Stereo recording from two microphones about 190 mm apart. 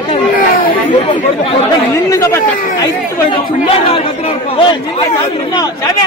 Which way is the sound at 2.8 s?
30° left (ahead or behind).